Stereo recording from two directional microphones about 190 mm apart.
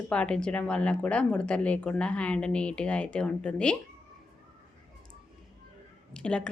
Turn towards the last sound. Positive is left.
turn(degrees=5)  # may be behind; listen again after turning